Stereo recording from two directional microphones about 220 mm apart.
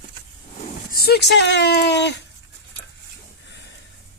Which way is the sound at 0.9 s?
45° left (ahead or behind).